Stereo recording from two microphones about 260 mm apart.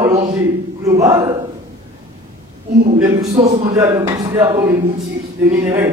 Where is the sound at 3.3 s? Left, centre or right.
Right.